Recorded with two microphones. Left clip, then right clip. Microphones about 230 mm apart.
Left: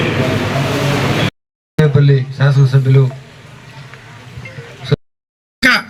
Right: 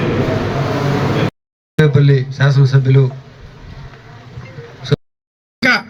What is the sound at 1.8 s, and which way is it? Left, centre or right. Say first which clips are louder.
Speech: even; left.